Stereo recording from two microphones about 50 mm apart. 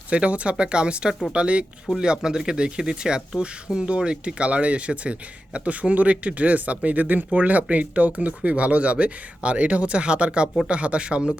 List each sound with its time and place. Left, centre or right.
0.1 s speech: right